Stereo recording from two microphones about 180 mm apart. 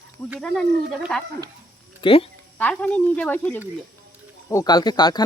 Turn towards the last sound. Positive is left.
turn(degrees=25)  # may be behind; listen again after turning